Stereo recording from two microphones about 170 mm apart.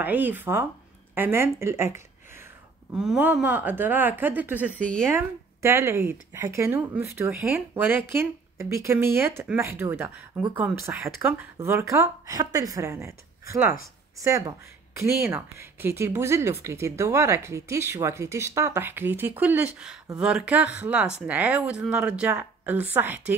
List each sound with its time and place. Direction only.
0.0 s speech: 10° right (ahead or behind)
2.9 s speech: 5° right (ahead or behind)
4.7 s speech: 5° left (ahead or behind)
5.1 s speech: 15° right (ahead or behind)